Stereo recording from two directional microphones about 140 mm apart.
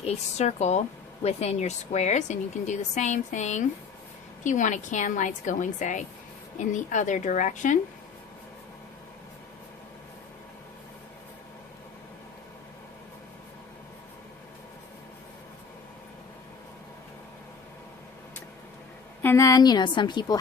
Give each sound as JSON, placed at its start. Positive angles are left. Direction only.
{"t": 0.0, "sound": "speech", "side_deg": 50}
{"t": 19.2, "sound": "a woman's voice", "side_deg": 20}